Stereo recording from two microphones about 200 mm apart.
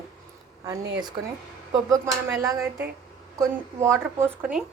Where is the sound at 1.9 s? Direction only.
15° right (ahead or behind).